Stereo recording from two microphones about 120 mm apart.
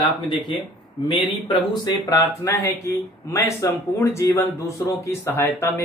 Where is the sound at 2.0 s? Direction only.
25° left (ahead or behind).